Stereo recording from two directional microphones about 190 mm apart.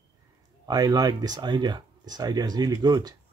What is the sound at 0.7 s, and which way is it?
Speech, 20° right (ahead or behind).